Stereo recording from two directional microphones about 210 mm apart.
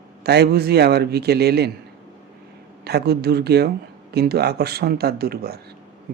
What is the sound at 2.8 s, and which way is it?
Speech, 50° right (ahead or behind).